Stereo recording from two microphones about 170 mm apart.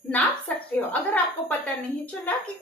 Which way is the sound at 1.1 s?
10° left (ahead or behind).